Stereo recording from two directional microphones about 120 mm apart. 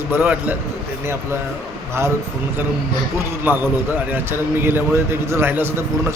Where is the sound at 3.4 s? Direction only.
15° right (ahead or behind).